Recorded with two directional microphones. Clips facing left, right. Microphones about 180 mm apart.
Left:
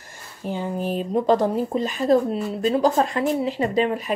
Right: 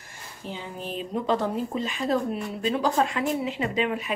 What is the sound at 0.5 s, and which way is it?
A woman's voice, 45° left (ahead or behind).